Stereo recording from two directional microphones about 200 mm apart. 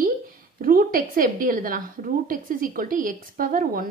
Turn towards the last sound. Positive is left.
turn(degrees=-45)  # may be behind; listen again after turning